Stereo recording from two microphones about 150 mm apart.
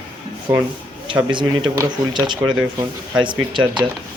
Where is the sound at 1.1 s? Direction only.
35° right (ahead or behind).